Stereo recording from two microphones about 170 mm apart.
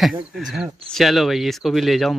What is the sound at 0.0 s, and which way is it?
Speech, 5° right (ahead or behind).